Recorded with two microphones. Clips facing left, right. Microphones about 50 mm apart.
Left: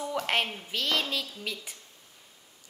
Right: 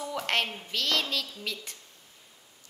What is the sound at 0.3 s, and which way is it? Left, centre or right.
A woman's voice, centre.